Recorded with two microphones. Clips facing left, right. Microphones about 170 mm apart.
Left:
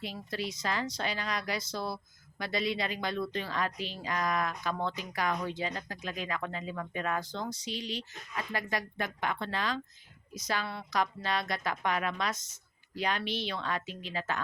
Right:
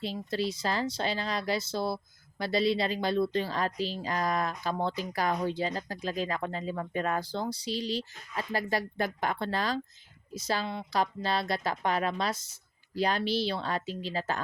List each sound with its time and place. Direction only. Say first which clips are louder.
0.0 s a woman's voice: right 5 dB; 30° right (ahead or behind)